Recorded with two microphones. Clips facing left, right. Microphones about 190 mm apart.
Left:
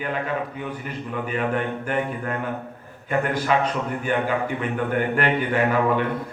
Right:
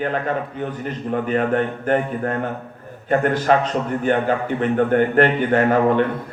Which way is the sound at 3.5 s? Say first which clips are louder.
Right 4 dB; 45° right (ahead or behind).